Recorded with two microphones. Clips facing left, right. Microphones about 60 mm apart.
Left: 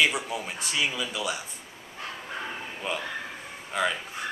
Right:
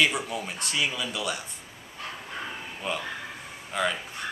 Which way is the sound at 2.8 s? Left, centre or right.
Centre.